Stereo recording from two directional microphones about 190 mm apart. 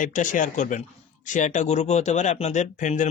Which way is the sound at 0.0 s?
40° left (ahead or behind).